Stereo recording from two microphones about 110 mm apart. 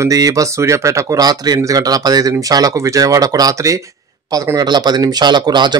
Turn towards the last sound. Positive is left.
turn(degrees=-45)  # may be behind; listen again after turning